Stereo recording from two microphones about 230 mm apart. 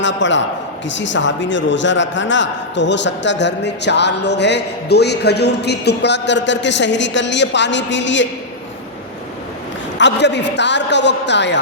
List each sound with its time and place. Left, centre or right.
0.0 s a man's voice: left
10.0 s a man's voice: left